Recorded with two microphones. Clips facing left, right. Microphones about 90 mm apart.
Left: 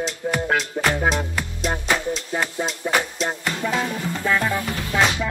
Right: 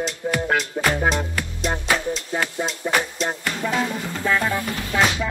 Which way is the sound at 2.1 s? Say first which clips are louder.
Even; 5° left (ahead or behind).